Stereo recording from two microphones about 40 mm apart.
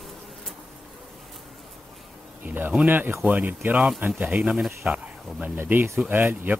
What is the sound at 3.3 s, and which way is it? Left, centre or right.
Speech, right.